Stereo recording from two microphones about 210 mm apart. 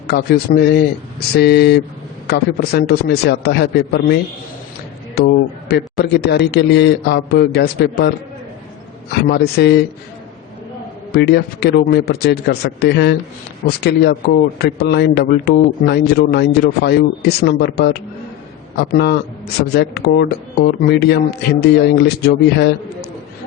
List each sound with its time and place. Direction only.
0.1 s a man's voice: 50° left (ahead or behind)
9.3 s a man's voice: 50° left (ahead or behind)
11.1 s a man's voice: 55° left (ahead or behind)